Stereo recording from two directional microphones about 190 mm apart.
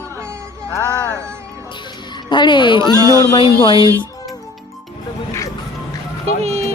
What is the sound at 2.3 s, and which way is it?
Speech, 25° left (ahead or behind).